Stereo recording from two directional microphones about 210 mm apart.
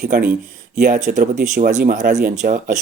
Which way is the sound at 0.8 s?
35° right (ahead or behind).